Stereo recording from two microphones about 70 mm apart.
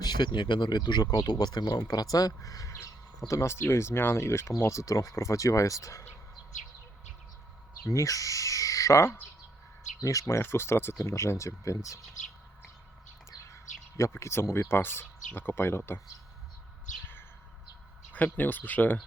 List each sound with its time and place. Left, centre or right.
0.0 s speech: left
3.2 s speech: left
4.7 s speech: left
7.9 s speech: left
13.5 s bird: left
14.1 s speech: left
18.1 s speech: left